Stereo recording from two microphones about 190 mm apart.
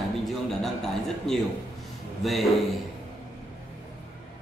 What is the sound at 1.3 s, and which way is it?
A man's voice, centre (ahead or behind).